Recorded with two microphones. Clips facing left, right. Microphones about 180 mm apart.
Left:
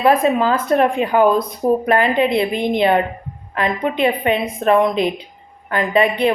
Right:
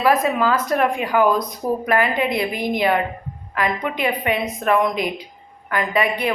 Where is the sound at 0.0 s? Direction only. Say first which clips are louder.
Left 3 dB; 25° left (ahead or behind).